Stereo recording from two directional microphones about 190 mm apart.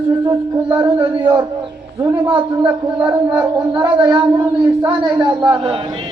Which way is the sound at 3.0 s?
10° right (ahead or behind).